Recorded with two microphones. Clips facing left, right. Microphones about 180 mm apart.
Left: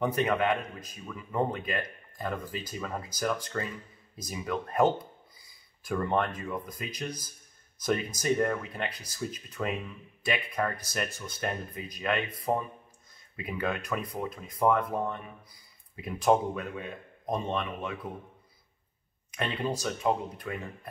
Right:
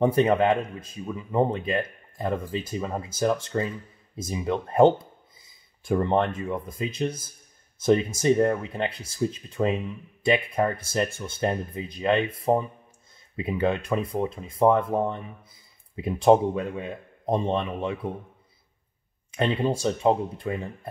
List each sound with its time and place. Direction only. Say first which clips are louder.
0.0 s speech: right 7 dB; 30° right (ahead or behind)
19.3 s speech: right 7 dB; 30° right (ahead or behind)